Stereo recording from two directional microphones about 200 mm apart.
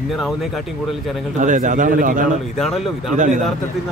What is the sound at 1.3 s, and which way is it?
Speech, 40° right (ahead or behind).